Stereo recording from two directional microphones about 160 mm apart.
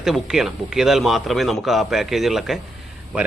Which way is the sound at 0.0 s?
5° right (ahead or behind).